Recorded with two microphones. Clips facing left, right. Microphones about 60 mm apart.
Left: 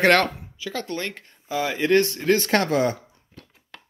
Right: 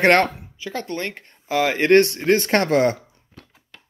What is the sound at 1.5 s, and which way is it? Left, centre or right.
Speech, right.